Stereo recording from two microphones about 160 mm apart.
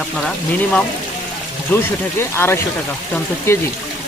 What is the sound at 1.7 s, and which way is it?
Speech, 10° left (ahead or behind).